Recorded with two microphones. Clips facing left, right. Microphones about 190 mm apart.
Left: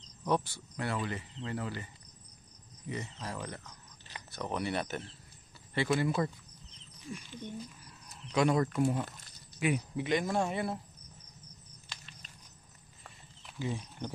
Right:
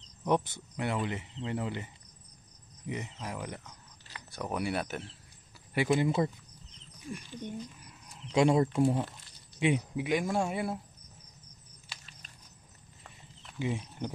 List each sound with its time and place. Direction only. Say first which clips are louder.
0.3 s speech: right 2 dB; 20° right (ahead or behind)
2.9 s speech: right 1 dB; 15° right (ahead or behind)
5.8 s speech: right 3 dB; 20° right (ahead or behind)
8.2 s speech: right 3 dB; 25° right (ahead or behind)
9.9 s speech: right 1 dB; 10° right (ahead or behind)
13.6 s speech: right 3 dB; 15° right (ahead or behind)